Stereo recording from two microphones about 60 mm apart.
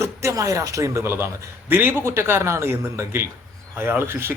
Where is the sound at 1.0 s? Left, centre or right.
Right.